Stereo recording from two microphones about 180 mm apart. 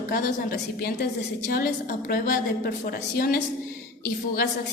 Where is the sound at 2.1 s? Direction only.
55° left (ahead or behind).